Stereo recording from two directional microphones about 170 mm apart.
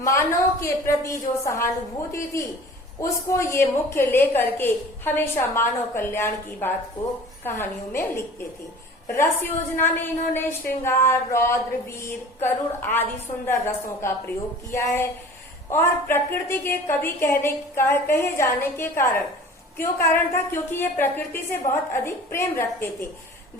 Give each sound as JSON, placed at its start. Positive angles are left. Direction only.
{"t": 0.0, "sound": "a woman's voice", "side_deg": 15}
{"t": 9.7, "sound": "a woman's voice", "side_deg": 10}